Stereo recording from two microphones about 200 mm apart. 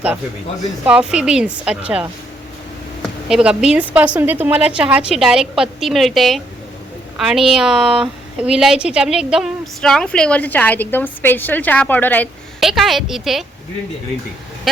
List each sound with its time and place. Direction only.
0.9 s a woman's voice: 5° right (ahead or behind)